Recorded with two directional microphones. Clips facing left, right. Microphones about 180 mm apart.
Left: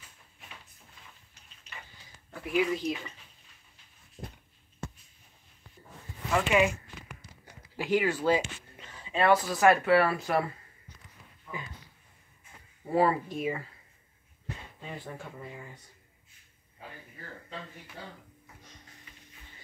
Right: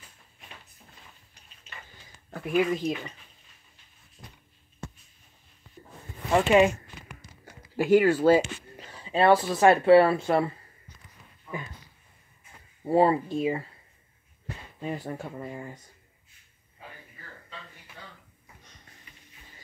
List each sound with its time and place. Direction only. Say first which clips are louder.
2.3 s speech: right 3 dB; 50° right (ahead or behind)
4.2 s a sound: left 7 dB; 45° left (ahead or behind)
6.3 s speech: right 5 dB; 35° right (ahead or behind)
7.7 s speech: right 8 dB; 45° right (ahead or behind); by 10.5 s 25° right (ahead or behind)
12.9 s speech: right 4 dB; 25° right (ahead or behind)
14.8 s speech: right 10 dB; 40° right (ahead or behind)